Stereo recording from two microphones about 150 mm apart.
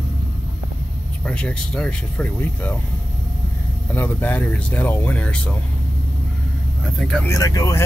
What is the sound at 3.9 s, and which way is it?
Speech, 10° left (ahead or behind).